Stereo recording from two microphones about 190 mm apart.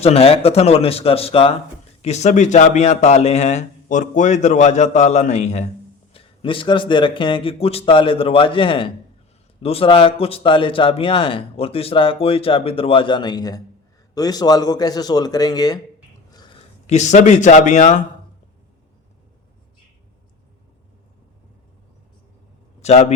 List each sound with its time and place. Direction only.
0.0 s a man's voice: 30° left (ahead or behind)
16.8 s speech: 35° left (ahead or behind)
22.8 s a man's voice: 35° left (ahead or behind)